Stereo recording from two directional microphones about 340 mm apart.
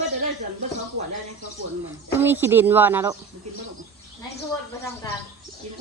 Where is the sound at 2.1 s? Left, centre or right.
Centre.